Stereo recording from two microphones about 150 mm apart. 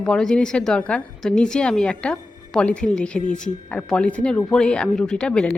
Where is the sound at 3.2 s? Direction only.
55° left (ahead or behind).